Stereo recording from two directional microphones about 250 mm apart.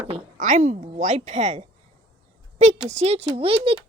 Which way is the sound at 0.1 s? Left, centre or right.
Right.